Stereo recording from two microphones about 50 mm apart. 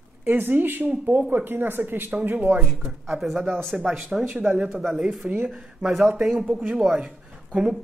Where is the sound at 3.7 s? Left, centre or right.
Right.